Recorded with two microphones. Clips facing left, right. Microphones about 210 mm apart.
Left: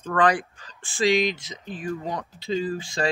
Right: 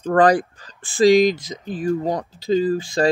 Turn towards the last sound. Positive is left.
turn(degrees=-35)  # may be behind; listen again after turning